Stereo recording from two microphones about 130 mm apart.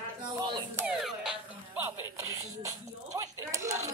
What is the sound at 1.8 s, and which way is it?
Music, 25° right (ahead or behind).